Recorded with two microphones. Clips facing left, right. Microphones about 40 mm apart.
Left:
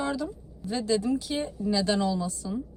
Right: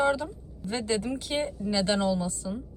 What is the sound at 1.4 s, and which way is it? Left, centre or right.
Speech, centre.